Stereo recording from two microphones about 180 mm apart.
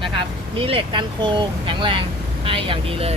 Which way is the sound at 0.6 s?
30° right (ahead or behind).